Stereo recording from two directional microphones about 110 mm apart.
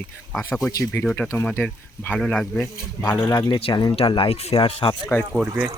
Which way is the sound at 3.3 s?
35° left (ahead or behind).